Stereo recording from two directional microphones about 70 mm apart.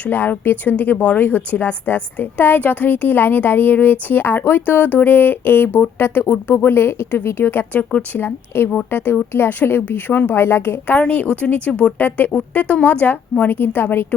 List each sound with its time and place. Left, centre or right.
0.0 s a woman's voice: left
10.8 s speech: left
11.9 s speech: left